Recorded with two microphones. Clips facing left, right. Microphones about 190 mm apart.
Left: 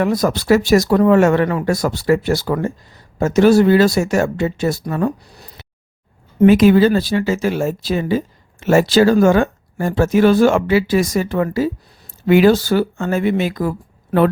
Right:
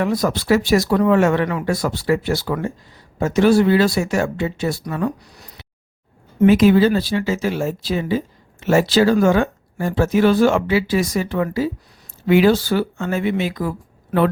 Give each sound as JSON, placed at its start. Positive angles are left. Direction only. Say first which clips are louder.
{"t": 0.0, "sound": "speech", "louder": "left 3 dB", "side_deg": 45}
{"t": 5.2, "sound": "speech", "louder": "left 2 dB", "side_deg": 30}
{"t": 6.4, "sound": "speech", "louder": "left 2 dB", "side_deg": 50}